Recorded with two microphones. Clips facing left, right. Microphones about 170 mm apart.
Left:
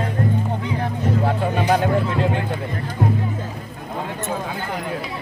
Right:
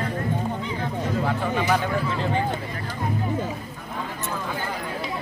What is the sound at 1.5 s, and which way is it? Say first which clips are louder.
Music: left 4 dB; 55° left (ahead or behind).